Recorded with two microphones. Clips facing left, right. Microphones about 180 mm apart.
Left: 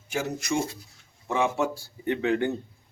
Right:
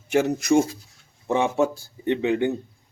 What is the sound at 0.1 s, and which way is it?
Speech, 60° right (ahead or behind).